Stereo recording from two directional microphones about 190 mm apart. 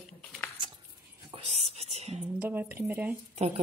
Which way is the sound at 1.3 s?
30° right (ahead or behind).